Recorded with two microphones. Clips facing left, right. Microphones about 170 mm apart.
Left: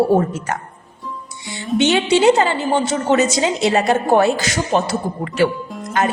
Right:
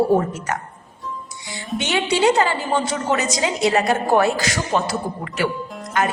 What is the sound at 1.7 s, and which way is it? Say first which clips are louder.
A woman's voice: left 6 dB; 25° left (ahead or behind).